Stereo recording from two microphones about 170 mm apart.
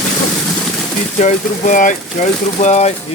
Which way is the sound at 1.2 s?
50° left (ahead or behind).